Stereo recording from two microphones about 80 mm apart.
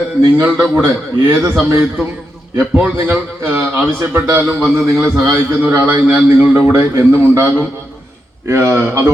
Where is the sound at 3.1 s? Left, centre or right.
Right.